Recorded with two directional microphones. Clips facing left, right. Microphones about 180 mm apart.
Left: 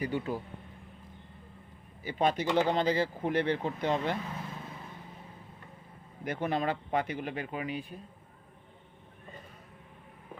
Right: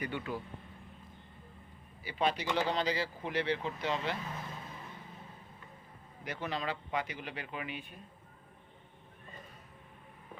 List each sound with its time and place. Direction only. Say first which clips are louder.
0.0 s speech: left 5 dB; 35° left (ahead or behind)
2.0 s speech: left 4 dB; 50° left (ahead or behind)
6.2 s speech: left 6 dB; 50° left (ahead or behind); by 7.9 s 35° left (ahead or behind)